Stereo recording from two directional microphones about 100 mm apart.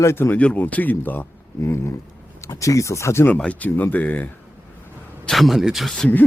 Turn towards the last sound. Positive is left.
turn(degrees=0)  # may be behind; listen again after turning